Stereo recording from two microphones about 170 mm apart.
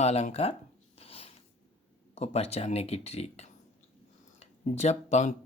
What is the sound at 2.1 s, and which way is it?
Speech, 40° left (ahead or behind).